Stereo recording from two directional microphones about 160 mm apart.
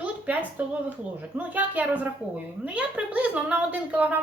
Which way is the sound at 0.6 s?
10° right (ahead or behind).